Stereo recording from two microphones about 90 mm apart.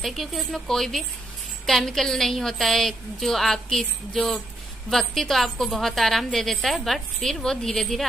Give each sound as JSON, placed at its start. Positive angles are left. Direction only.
{"t": 0.0, "sound": "a woman's voice", "side_deg": 0}